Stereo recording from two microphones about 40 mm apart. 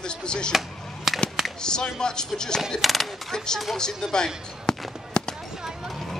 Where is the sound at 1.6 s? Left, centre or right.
Centre.